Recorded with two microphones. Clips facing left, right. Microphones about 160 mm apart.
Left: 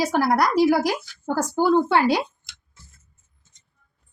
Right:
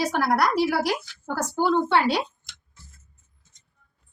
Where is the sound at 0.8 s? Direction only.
40° left (ahead or behind).